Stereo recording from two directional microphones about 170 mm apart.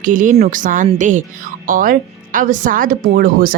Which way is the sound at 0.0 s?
50° right (ahead or behind).